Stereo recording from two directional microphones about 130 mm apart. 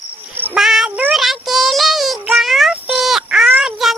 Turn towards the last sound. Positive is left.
turn(degrees=-5)  # may be behind; listen again after turning